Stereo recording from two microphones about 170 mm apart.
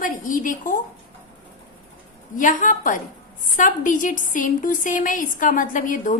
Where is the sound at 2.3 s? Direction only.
50° left (ahead or behind).